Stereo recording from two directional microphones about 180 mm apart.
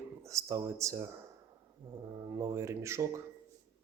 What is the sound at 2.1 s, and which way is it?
Speech, 20° right (ahead or behind).